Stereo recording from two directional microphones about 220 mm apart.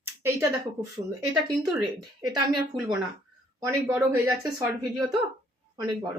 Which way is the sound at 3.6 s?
15° right (ahead or behind).